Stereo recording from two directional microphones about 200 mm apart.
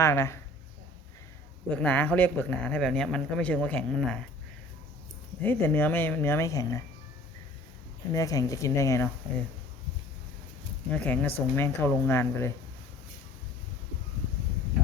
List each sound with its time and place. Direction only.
0.0 s speech: 15° left (ahead or behind)
1.7 s speech: 10° left (ahead or behind)
5.4 s speech: 10° left (ahead or behind)
8.1 s speech: 15° left (ahead or behind)
10.9 s speech: 10° left (ahead or behind)